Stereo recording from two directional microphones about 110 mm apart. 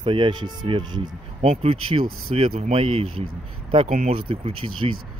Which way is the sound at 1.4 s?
70° right (ahead or behind).